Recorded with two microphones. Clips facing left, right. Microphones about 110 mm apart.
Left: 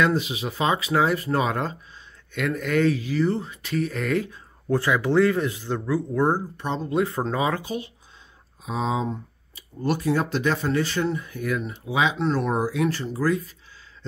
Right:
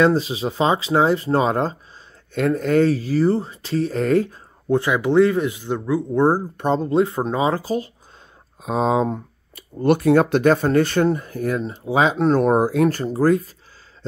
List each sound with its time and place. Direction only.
0.0 s speech: 35° right (ahead or behind)
4.6 s speech: 20° right (ahead or behind)
6.5 s speech: 45° right (ahead or behind)
6.9 s speech: 25° right (ahead or behind)
8.6 s speech: 50° right (ahead or behind)